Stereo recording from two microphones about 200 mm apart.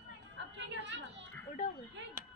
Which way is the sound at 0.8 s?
65° right (ahead or behind).